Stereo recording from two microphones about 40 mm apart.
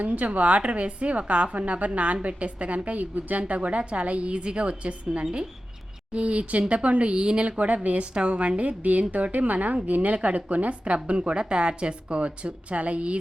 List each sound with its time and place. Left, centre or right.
0.0 s a woman's voice: right
6.1 s a woman's voice: right